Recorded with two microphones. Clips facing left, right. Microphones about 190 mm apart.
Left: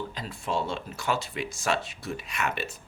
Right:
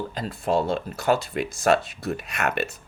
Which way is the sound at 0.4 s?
40° right (ahead or behind).